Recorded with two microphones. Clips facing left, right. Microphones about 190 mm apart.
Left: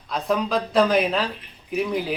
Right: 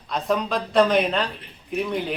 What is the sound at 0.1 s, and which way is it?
Speech, centre (ahead or behind).